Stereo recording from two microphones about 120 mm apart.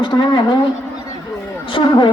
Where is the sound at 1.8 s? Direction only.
40° left (ahead or behind).